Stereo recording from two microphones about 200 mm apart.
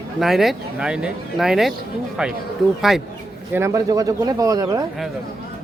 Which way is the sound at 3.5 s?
15° right (ahead or behind).